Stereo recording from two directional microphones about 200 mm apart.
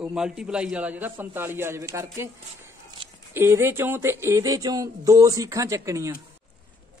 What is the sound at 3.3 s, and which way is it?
Speech, 10° right (ahead or behind).